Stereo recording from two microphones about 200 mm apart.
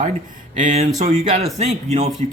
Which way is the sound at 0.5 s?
40° right (ahead or behind).